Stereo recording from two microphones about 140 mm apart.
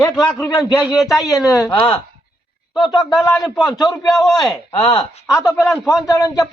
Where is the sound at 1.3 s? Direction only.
20° left (ahead or behind).